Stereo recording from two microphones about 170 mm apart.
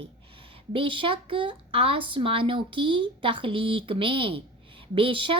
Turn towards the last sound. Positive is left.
turn(degrees=-30)  # may be behind; listen again after turning